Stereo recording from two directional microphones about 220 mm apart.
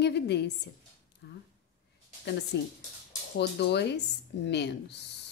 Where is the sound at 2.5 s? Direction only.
50° left (ahead or behind).